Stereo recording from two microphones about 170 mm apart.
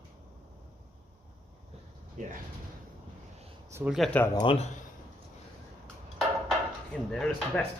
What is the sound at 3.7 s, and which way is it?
Speech, 5° right (ahead or behind).